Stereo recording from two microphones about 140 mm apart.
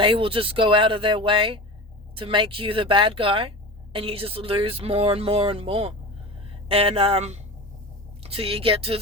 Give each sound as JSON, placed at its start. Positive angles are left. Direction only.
{"t": 0.0, "sound": "speech", "side_deg": -40}